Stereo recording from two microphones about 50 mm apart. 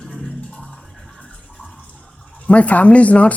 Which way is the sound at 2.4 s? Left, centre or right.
Left.